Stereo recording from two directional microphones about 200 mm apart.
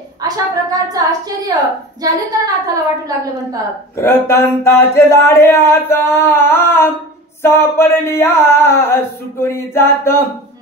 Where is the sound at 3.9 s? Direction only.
10° left (ahead or behind).